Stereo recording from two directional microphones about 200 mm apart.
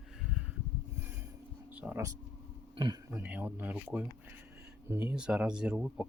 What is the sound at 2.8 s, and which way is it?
Speech, 25° right (ahead or behind).